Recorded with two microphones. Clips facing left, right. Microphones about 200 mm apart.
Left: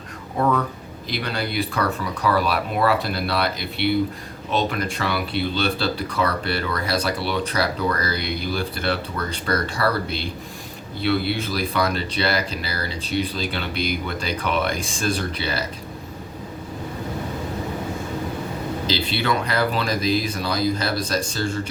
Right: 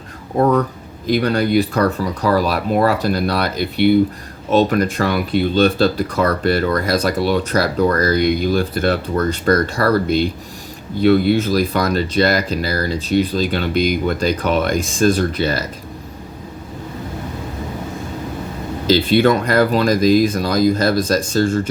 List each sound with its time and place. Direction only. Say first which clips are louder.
0.3 s speech: right 6 dB; 40° right (ahead or behind)
19.0 s speech: right 10 dB; 45° right (ahead or behind)